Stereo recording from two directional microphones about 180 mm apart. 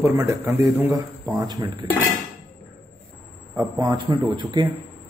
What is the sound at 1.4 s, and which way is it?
Speech, 25° right (ahead or behind).